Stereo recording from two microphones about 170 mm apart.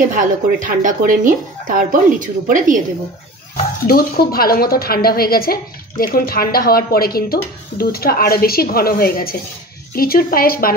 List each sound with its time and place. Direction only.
0.1 s speech: 50° right (ahead or behind)
3.8 s a woman's voice: 60° left (ahead or behind)